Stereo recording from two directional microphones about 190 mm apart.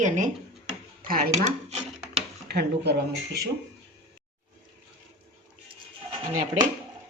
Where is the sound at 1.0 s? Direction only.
45° right (ahead or behind).